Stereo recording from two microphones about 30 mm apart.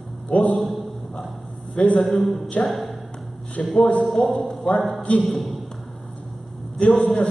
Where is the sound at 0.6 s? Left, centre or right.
Centre.